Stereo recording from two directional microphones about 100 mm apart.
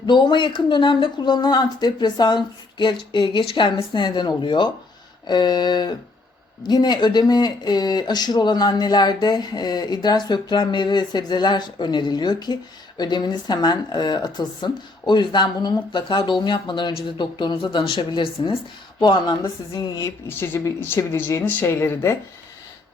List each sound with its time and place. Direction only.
0.1 s a woman's voice: 50° left (ahead or behind)
20.2 s speech: 20° left (ahead or behind)